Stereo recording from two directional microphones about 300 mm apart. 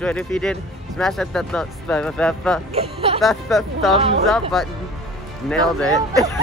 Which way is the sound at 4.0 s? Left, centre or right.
Centre.